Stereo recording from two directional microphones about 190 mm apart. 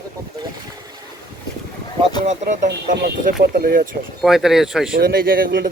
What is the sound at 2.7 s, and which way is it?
Speech, 55° right (ahead or behind).